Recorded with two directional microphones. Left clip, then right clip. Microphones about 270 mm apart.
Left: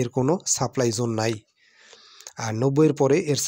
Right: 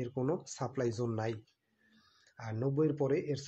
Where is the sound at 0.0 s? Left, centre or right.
Left.